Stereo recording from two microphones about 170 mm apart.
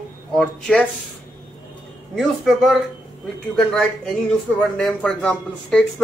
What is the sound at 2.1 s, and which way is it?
Speech, centre (ahead or behind).